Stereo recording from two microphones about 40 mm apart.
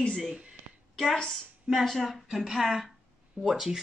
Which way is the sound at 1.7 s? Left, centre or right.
Centre.